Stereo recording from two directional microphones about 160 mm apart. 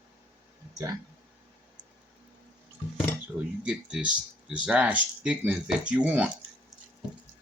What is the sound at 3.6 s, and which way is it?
Speech, 5° right (ahead or behind).